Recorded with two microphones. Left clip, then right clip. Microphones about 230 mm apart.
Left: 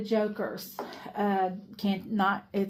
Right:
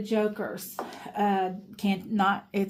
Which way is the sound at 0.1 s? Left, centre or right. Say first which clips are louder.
Right 1 dB; right.